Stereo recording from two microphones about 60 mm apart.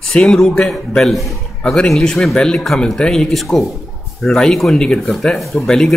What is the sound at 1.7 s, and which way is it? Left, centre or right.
A man's voice, centre.